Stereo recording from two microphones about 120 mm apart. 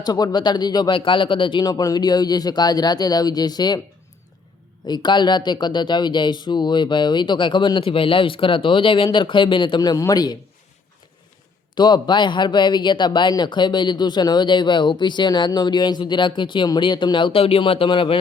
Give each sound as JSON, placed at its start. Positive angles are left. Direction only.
{"t": 0.0, "sound": "speech", "side_deg": 35}
{"t": 4.9, "sound": "speech", "side_deg": 40}
{"t": 11.7, "sound": "speech", "side_deg": 40}